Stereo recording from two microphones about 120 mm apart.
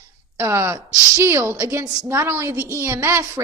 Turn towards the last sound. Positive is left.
turn(degrees=-25)  # may be behind; listen again after turning